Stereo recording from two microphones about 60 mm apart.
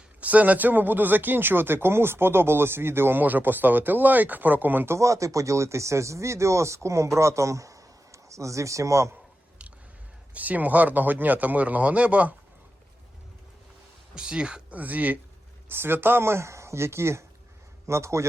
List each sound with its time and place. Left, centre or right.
0.2 s speech: right
4.9 s speech: right
10.3 s speech: right
14.2 s speech: centre
15.7 s speech: right